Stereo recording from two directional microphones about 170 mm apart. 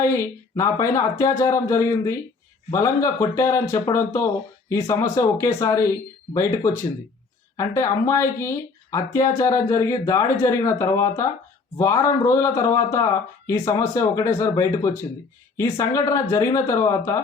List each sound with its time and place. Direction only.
0.1 s speech: 15° left (ahead or behind)